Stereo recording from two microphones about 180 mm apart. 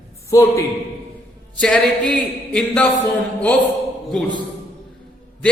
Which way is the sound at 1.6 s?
5° left (ahead or behind).